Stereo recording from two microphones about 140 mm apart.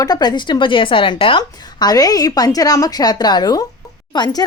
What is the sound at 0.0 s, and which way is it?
A woman's voice, 30° left (ahead or behind).